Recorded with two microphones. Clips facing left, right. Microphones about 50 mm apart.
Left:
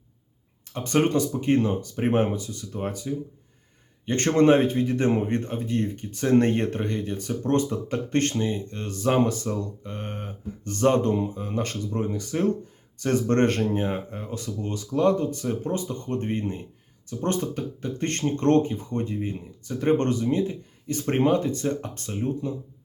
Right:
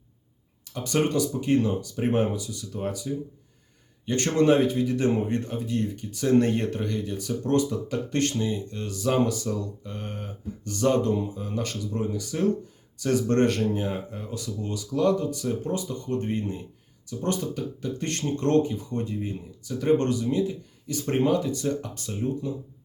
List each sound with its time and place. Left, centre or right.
0.7 s speech: left